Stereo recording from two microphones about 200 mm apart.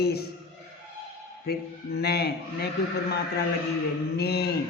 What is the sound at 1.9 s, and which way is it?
Speech, 55° left (ahead or behind).